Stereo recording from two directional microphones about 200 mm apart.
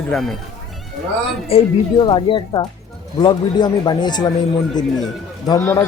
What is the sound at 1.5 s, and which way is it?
Speech, 25° left (ahead or behind).